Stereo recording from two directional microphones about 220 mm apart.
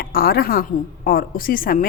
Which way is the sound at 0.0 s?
40° left (ahead or behind).